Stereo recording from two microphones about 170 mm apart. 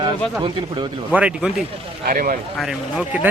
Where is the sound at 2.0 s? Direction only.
55° right (ahead or behind).